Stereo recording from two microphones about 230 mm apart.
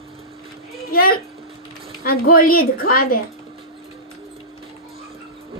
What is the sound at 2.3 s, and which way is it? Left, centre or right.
Speech, left.